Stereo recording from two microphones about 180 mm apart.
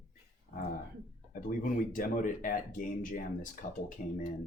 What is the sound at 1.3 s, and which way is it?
Speech, 50° left (ahead or behind).